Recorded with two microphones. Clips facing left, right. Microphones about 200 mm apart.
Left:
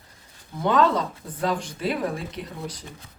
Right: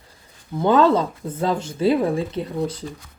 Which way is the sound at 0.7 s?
30° right (ahead or behind).